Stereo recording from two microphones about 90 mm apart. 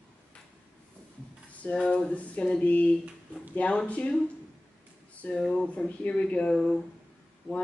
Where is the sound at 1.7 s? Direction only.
10° left (ahead or behind).